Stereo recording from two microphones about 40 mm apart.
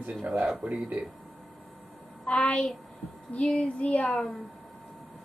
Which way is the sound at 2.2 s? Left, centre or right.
Left.